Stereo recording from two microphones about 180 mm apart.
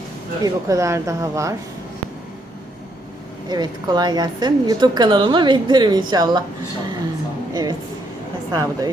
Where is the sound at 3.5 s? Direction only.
20° right (ahead or behind).